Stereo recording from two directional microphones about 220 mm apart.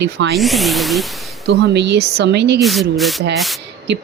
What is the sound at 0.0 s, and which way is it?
Speech, 50° right (ahead or behind).